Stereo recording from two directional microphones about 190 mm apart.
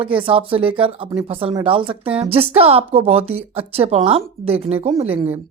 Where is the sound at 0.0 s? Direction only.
30° right (ahead or behind).